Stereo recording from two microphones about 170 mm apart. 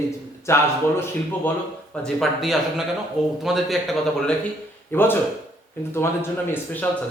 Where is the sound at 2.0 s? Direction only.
Centre (ahead or behind).